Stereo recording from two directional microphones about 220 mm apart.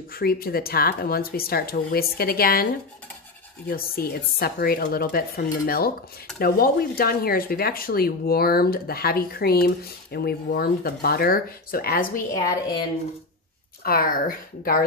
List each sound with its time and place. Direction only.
0.1 s speech: 40° left (ahead or behind)
13.8 s speech: 40° left (ahead or behind)